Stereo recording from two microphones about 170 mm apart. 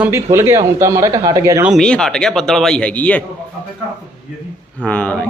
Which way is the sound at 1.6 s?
Centre (ahead or behind).